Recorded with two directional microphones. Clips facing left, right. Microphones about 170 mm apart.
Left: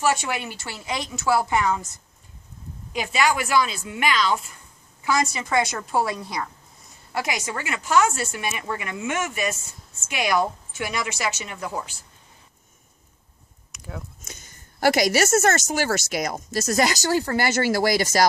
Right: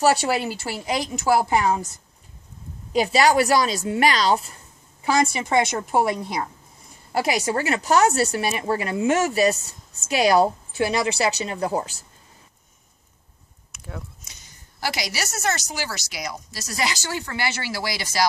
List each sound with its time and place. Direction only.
0.0 s speech: 35° right (ahead or behind)
2.9 s a woman's voice: 35° right (ahead or behind)
13.7 s a sound: centre (ahead or behind)
14.2 s speech: 50° left (ahead or behind)